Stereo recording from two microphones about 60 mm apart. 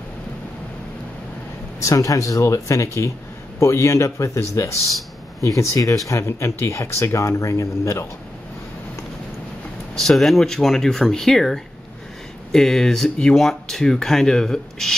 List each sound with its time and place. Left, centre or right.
1.8 s speech: left
5.6 s speech: left
9.9 s speech: centre